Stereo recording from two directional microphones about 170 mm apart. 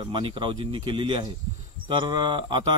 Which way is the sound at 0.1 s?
30° right (ahead or behind).